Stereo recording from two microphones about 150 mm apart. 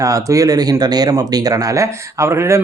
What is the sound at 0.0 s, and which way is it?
Speech, 20° right (ahead or behind).